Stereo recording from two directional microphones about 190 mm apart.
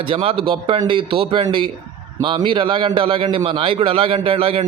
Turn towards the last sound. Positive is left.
turn(degrees=-30)  # may be behind; listen again after turning